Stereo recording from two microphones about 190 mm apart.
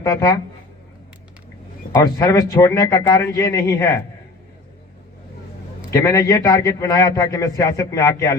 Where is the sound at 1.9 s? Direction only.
15° left (ahead or behind).